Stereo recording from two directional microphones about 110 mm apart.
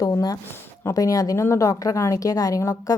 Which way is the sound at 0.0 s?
35° left (ahead or behind).